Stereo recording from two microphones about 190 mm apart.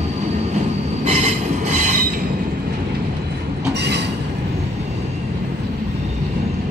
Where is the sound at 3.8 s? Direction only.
60° right (ahead or behind).